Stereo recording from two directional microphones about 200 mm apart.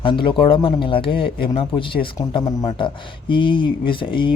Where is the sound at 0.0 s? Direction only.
25° left (ahead or behind).